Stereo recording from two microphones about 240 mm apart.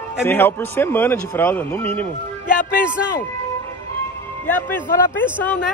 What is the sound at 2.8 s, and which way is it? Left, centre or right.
Speech, centre.